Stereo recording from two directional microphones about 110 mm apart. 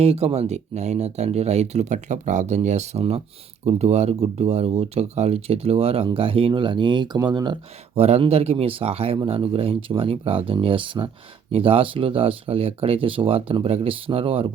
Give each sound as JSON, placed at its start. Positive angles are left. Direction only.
{"t": 0.0, "sound": "speech", "side_deg": -70}
{"t": 7.9, "sound": "speech", "side_deg": -70}